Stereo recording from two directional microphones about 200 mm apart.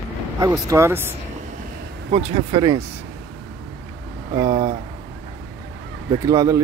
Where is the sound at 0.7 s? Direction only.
15° right (ahead or behind).